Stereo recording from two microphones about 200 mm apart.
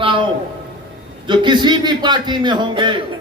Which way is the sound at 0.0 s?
25° right (ahead or behind).